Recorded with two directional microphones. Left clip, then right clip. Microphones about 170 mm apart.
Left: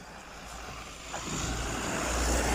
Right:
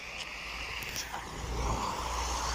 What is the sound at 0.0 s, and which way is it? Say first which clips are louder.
Vehicle: right 5 dB; 90° left.